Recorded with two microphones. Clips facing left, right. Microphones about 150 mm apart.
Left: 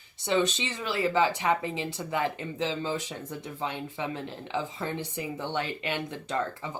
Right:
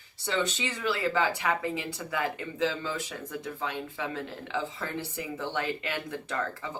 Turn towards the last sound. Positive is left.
turn(degrees=20)  # may be behind; listen again after turning